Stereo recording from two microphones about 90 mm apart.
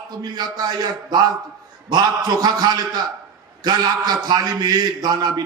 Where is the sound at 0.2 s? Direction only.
50° right (ahead or behind).